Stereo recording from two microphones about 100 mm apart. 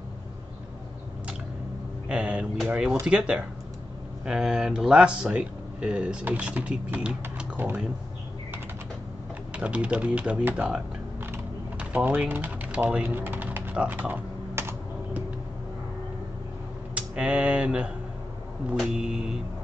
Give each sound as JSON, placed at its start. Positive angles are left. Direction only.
{"t": 2.0, "sound": "a sound", "side_deg": -10}
{"t": 2.7, "sound": "speech", "side_deg": -5}
{"t": 9.5, "sound": "typewriter", "side_deg": -10}
{"t": 16.9, "sound": "speech", "side_deg": -10}
{"t": 18.9, "sound": "speech", "side_deg": -5}